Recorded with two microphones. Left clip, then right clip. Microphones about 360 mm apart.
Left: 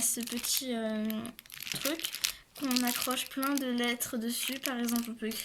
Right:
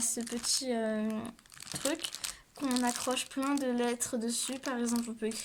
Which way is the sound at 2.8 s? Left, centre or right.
Right.